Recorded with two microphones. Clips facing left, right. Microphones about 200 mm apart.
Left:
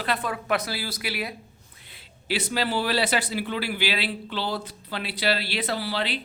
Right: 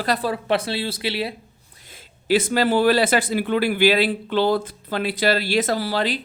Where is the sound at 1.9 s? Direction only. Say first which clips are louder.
Right 10 dB; 50° right (ahead or behind).